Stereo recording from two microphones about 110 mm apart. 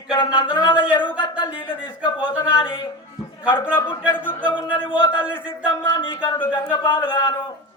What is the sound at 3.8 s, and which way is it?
Speech, 20° left (ahead or behind).